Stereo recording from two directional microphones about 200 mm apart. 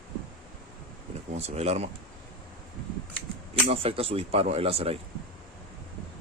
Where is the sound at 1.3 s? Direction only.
30° right (ahead or behind).